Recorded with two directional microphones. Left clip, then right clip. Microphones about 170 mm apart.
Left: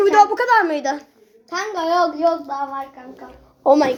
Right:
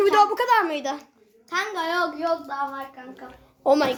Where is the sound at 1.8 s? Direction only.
30° right (ahead or behind).